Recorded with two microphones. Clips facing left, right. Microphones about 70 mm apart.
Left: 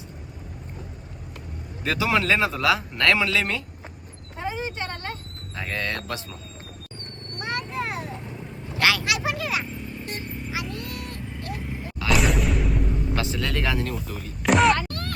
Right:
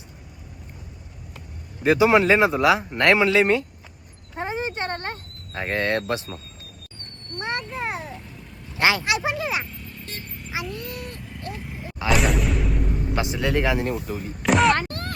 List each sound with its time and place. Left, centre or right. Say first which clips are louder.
1.8 s speech: right 7 dB; right
4.4 s a sound: right 2 dB; right
7.3 s vehicle: right 1 dB; right
8.8 s a sound: right 2 dB; right
9.6 s vehicle: left 5 dB; centre
10.2 s vehicle: left 5 dB; centre
12.0 s music: right 1 dB; centre
13.1 s speech: right 6 dB; right
14.4 s a sound: even; centre
14.8 s music: right 2 dB; right